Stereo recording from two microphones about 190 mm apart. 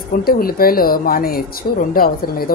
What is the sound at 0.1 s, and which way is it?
Speech, 50° left (ahead or behind).